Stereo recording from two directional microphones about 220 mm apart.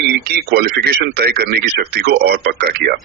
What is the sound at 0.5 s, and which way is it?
Speech, 45° right (ahead or behind).